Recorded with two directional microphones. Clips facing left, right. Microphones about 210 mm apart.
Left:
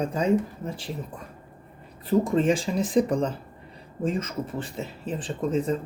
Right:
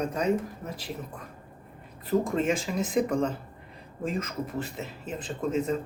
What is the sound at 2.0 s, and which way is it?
Speech, 30° left (ahead or behind).